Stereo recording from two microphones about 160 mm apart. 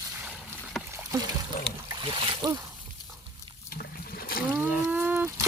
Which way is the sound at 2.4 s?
25° right (ahead or behind).